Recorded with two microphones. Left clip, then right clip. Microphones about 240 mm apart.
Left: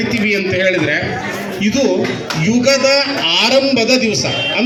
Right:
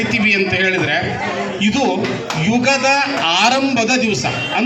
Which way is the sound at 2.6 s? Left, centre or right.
Right.